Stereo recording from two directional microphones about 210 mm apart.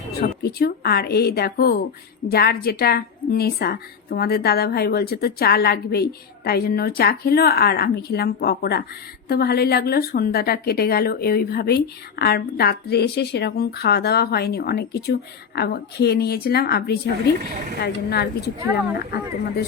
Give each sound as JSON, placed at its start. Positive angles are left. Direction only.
{"t": 0.2, "sound": "a woman's voice", "side_deg": 45}